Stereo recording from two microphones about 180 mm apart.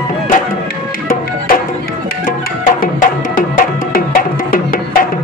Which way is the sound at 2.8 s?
50° left (ahead or behind).